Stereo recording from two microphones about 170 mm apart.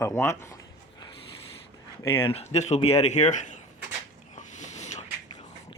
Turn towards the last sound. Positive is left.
turn(degrees=40)  # may be behind; listen again after turning